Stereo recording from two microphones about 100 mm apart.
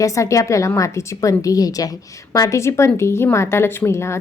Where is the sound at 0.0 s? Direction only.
30° left (ahead or behind).